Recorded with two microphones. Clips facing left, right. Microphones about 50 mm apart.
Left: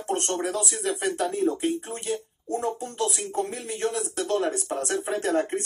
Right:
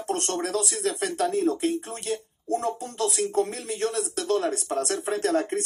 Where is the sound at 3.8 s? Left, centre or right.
Left.